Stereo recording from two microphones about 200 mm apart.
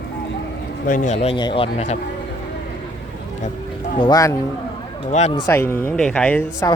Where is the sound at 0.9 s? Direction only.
40° left (ahead or behind).